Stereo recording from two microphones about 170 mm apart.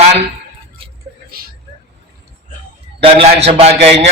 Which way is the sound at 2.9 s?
35° right (ahead or behind).